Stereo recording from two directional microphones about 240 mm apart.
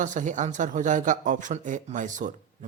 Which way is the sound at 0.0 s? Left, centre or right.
Right.